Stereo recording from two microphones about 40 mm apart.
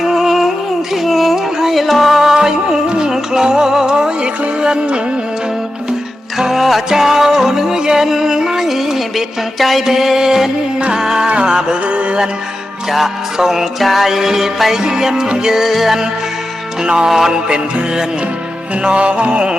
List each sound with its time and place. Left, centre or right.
0.0 s music: centre
2.3 s music: centre
6.5 s music: centre
11.9 s music: right
12.9 s music: centre
16.8 s music: centre
17.1 s music: centre
17.3 s music: right